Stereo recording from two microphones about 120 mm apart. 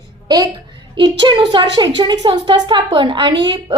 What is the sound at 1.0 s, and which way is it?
A woman's voice, 40° right (ahead or behind).